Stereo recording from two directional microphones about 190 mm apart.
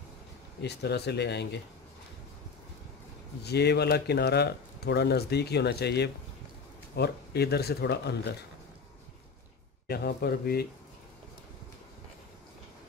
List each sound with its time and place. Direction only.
0.6 s speech: 60° left (ahead or behind)
3.4 s speech: 60° left (ahead or behind)
9.8 s speech: 55° left (ahead or behind)